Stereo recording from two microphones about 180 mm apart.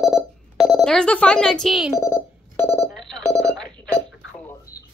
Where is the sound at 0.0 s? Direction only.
Centre (ahead or behind).